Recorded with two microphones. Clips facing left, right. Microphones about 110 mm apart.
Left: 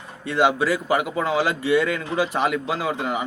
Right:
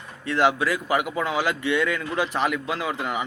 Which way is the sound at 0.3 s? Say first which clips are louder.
Left 2 dB; 5° left (ahead or behind).